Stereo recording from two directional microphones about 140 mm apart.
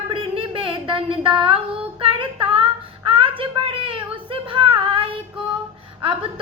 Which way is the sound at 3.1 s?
40° right (ahead or behind).